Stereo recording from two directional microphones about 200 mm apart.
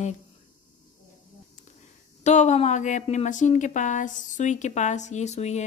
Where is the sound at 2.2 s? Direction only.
35° left (ahead or behind).